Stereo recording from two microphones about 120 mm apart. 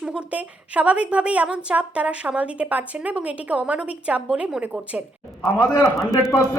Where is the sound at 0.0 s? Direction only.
10° right (ahead or behind).